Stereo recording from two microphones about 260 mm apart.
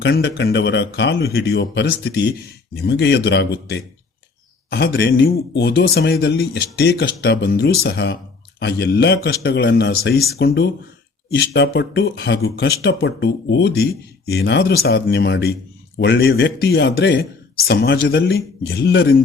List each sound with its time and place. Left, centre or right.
0.0 s speech: left